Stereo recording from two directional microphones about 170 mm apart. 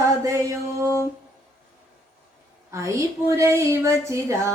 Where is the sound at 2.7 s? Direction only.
15° right (ahead or behind).